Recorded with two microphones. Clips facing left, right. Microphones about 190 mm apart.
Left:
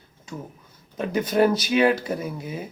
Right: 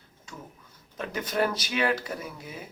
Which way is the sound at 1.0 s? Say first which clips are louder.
Left 8 dB; 20° left (ahead or behind).